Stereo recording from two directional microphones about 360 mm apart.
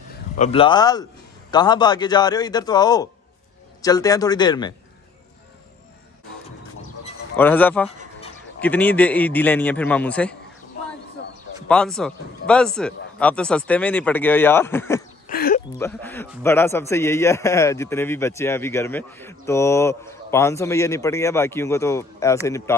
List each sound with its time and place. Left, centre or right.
0.4 s a man's voice: centre
7.3 s a man's voice: centre
11.6 s a man's voice: centre
15.2 s a sound: left
15.8 s a man's voice: centre